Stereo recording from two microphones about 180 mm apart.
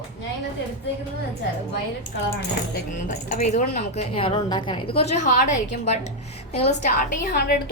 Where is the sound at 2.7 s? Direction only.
45° left (ahead or behind).